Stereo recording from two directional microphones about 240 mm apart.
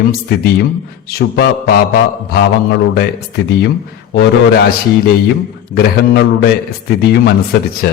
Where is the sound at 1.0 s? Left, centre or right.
Left.